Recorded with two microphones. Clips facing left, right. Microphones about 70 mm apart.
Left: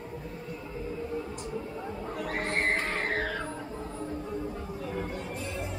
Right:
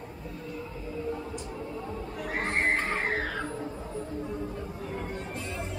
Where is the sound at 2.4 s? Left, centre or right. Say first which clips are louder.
Right 2 dB; right.